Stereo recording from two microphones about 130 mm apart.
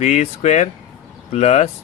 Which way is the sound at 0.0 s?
65° left (ahead or behind).